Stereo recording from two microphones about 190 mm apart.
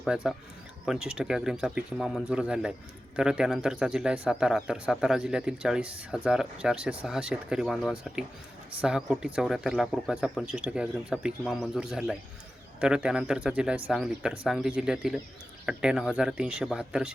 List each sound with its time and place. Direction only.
0.0 s a man's voice: 5° right (ahead or behind)